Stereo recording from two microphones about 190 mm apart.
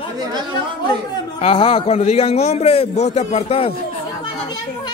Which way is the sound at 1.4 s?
25° left (ahead or behind).